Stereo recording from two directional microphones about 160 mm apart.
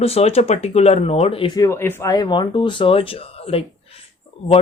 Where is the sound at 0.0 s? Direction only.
40° left (ahead or behind).